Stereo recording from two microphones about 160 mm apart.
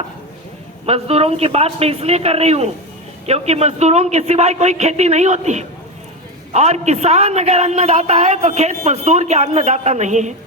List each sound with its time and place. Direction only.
0.9 s a woman's voice: 40° right (ahead or behind)